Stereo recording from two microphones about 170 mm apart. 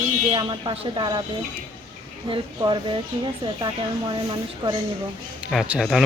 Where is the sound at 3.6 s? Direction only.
25° right (ahead or behind).